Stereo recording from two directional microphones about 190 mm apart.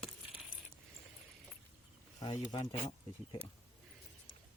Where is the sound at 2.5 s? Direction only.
25° left (ahead or behind).